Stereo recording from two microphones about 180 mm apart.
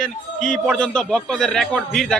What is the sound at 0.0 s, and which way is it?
A man's voice, 5° left (ahead or behind).